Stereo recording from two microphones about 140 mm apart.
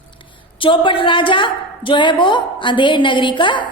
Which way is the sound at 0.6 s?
35° left (ahead or behind).